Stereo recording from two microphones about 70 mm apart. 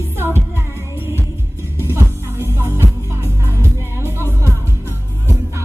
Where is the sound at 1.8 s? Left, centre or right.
Right.